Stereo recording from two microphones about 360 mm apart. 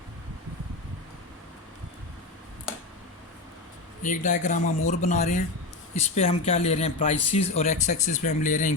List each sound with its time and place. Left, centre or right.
4.0 s speech: left